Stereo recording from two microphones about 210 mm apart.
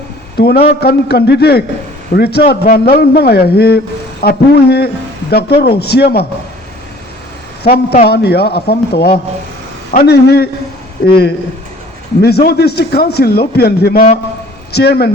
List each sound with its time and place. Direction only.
0.3 s a man's voice: 50° left (ahead or behind)
7.6 s a man's voice: 50° left (ahead or behind)
12.2 s a man's voice: 50° left (ahead or behind)